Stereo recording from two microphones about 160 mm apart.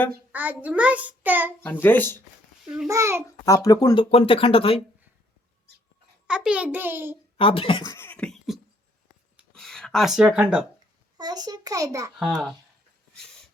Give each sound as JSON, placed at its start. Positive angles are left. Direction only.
{"t": 0.3, "sound": "a child's voice", "side_deg": -10}
{"t": 1.6, "sound": "a child's voice", "side_deg": 10}
{"t": 2.6, "sound": "a child's voice", "side_deg": -5}
{"t": 2.9, "sound": "a child's voice", "side_deg": -15}
{"t": 3.4, "sound": "speech", "side_deg": 20}
{"t": 4.0, "sound": "speech", "side_deg": 40}
{"t": 6.2, "sound": "a child's voice", "side_deg": -5}
{"t": 7.3, "sound": "speech", "side_deg": 35}
{"t": 7.9, "sound": "a sound", "side_deg": 10}
{"t": 9.6, "sound": "speech", "side_deg": 5}
{"t": 11.2, "sound": "a child's voice", "side_deg": -25}